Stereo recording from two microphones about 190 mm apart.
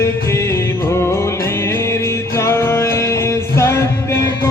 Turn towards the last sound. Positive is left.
turn(degrees=15)  # may be behind; listen again after turning